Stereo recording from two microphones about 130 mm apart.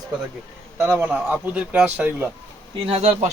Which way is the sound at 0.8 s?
15° right (ahead or behind).